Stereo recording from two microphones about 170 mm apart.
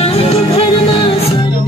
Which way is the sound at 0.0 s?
35° left (ahead or behind).